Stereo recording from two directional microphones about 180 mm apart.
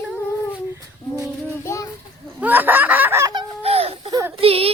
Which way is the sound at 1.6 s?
15° left (ahead or behind).